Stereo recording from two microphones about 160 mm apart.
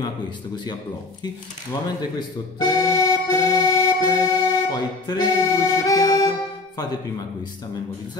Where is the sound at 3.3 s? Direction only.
20° left (ahead or behind).